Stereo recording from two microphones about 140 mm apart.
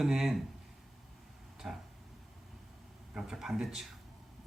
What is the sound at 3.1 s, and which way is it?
Speech, 5° right (ahead or behind).